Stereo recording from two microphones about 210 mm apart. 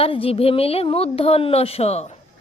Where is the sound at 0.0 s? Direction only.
25° left (ahead or behind).